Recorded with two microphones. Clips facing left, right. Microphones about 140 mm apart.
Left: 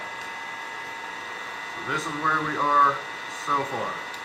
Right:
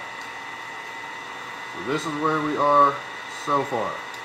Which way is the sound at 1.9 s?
30° right (ahead or behind).